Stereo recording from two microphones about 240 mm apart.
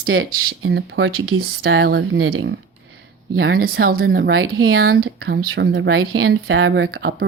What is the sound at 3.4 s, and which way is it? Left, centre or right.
Speech, right.